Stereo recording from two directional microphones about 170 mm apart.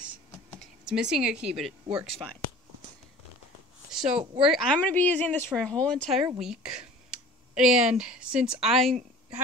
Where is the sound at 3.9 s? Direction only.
5° right (ahead or behind).